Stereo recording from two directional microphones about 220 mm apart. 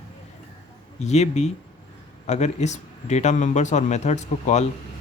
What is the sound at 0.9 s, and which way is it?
Speech, 30° left (ahead or behind).